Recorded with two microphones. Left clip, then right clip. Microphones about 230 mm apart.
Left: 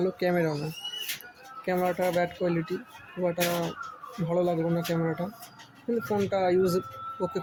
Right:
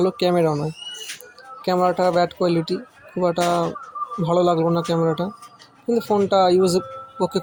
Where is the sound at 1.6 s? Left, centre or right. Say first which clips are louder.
Right 9 dB; right.